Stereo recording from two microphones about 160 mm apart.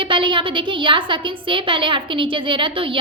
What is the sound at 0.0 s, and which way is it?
A woman's voice, 30° right (ahead or behind).